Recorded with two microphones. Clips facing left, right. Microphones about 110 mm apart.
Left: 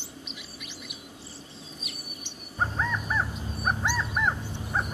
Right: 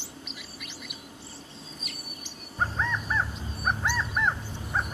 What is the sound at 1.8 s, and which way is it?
Bird, centre (ahead or behind).